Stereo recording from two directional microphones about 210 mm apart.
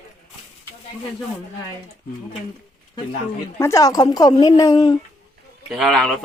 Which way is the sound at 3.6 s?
15° left (ahead or behind).